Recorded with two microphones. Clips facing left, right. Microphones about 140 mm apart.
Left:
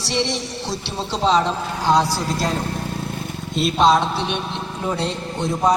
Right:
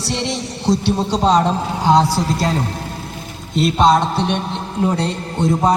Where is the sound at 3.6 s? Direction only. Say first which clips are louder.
Right 2 dB; centre (ahead or behind).